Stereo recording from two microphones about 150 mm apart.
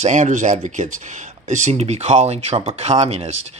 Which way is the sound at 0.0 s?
50° right (ahead or behind).